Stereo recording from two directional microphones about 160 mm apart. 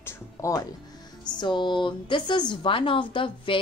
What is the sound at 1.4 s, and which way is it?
Speech, 30° left (ahead or behind).